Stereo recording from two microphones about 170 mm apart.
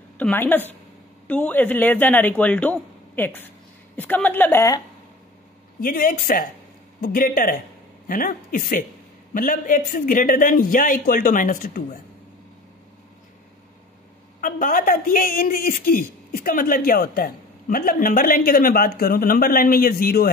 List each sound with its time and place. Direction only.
0.2 s a man's voice: 10° left (ahead or behind)
5.8 s a man's voice: 55° left (ahead or behind)
14.4 s a man's voice: 55° left (ahead or behind)